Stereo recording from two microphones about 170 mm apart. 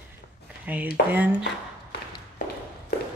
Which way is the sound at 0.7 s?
10° right (ahead or behind).